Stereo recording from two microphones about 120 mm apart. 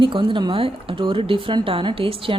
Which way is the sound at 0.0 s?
45° right (ahead or behind).